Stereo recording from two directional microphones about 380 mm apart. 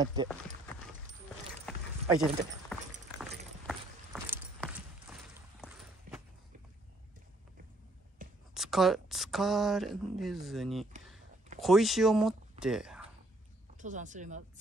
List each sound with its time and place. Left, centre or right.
0.0 s speech: centre
1.7 s clip-clop: centre
2.0 s walk: centre
8.2 s a sound: right
8.5 s speech: centre
13.7 s speech: centre